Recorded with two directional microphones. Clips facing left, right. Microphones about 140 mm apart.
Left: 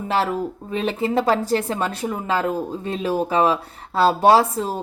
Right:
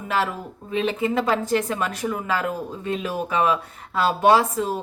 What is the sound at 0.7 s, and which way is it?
A woman's voice, 40° left (ahead or behind).